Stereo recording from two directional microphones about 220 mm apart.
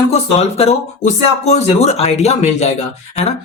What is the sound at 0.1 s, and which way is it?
Speech, 30° left (ahead or behind).